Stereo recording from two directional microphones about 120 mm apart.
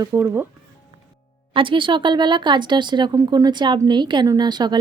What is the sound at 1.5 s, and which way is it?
A woman's voice, 45° right (ahead or behind).